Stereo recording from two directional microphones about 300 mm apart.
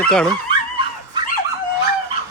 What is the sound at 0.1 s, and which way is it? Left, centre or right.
Speech, centre.